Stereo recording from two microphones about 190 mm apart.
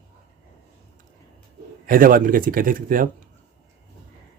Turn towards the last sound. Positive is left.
turn(degrees=-45)  # may be behind; listen again after turning